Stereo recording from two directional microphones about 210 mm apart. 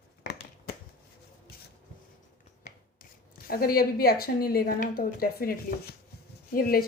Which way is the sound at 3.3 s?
45° left (ahead or behind).